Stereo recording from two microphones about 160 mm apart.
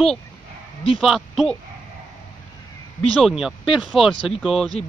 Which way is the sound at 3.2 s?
Centre (ahead or behind).